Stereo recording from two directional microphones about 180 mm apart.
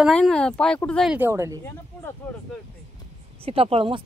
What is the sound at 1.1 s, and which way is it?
Speech, 15° right (ahead or behind).